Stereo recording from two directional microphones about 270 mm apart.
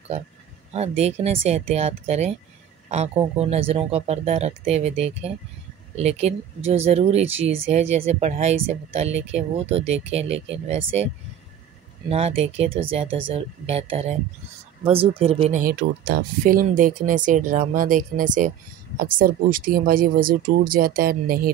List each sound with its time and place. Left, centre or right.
0.7 s speech: right
12.1 s speech: right